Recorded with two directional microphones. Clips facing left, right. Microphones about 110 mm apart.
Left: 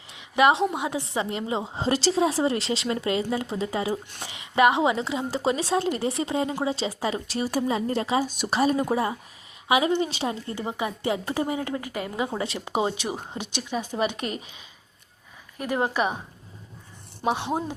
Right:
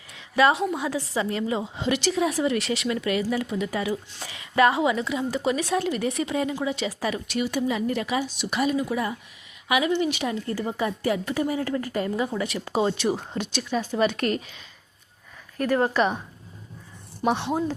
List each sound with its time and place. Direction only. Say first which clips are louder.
0.1 s a woman's voice: even; 20° left (ahead or behind)
8.3 s speech: left 3 dB; 45° left (ahead or behind)
8.5 s a woman's voice: left 2 dB; 35° left (ahead or behind); by 12.3 s 15° left (ahead or behind)
12.3 s a woman's voice: right 1 dB; 30° left (ahead or behind)
12.6 s speech: right 4 dB; 15° left (ahead or behind)
15.5 s speech: right 3 dB; 15° left (ahead or behind)
17.2 s speech: right 2 dB; 15° left (ahead or behind)